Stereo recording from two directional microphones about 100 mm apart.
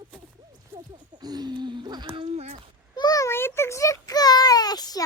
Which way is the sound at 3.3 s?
25° left (ahead or behind).